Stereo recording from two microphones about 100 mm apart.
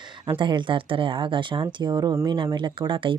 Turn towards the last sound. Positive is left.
turn(degrees=-60)  # may be behind; listen again after turning